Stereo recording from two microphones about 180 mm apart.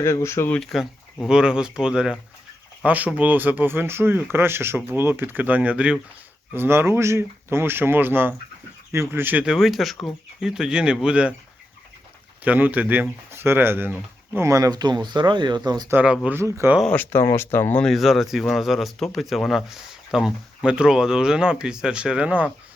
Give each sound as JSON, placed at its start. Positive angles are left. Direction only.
{"t": 0.0, "sound": "speech", "side_deg": 15}
{"t": 12.5, "sound": "speech", "side_deg": -10}
{"t": 16.9, "sound": "speech", "side_deg": 10}